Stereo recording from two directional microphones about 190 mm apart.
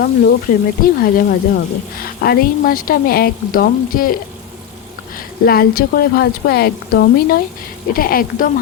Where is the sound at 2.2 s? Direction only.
50° left (ahead or behind).